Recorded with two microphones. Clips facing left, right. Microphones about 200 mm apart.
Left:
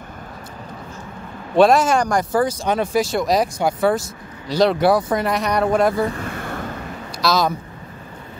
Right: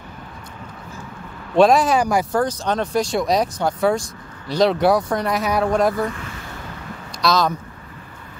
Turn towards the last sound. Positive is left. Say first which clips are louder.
# even
turn(degrees=5)  # may be behind; listen again after turning